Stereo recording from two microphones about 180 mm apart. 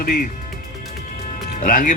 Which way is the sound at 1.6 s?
50° left (ahead or behind).